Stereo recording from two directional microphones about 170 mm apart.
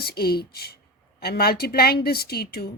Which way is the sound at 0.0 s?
65° left (ahead or behind).